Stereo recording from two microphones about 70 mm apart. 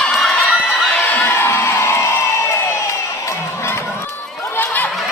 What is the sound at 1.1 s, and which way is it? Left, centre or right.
Crowd, left.